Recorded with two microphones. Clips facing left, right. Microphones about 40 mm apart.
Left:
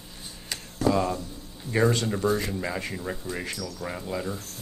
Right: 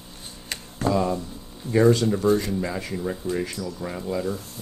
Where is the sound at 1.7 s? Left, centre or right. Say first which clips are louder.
Right 5 dB; left.